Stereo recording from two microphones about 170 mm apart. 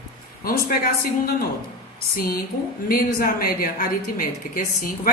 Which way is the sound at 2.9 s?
60° left (ahead or behind).